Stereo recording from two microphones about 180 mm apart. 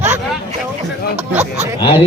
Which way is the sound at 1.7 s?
25° left (ahead or behind).